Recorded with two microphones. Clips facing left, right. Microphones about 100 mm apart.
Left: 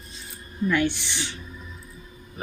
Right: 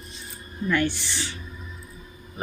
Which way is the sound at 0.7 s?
15° left (ahead or behind).